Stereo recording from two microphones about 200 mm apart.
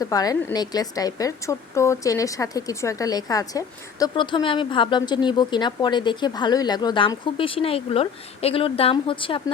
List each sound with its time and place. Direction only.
0.0 s a woman's voice: 20° left (ahead or behind)